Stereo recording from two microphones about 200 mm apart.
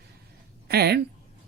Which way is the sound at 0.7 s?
55° right (ahead or behind).